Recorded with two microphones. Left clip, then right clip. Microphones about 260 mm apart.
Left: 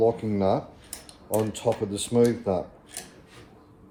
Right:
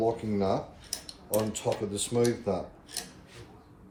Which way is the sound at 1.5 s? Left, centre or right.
Left.